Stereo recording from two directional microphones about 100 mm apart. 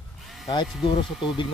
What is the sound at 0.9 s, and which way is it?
Speech, 55° left (ahead or behind).